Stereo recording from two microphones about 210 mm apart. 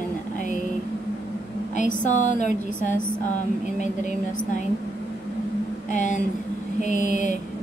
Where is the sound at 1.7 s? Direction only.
35° left (ahead or behind).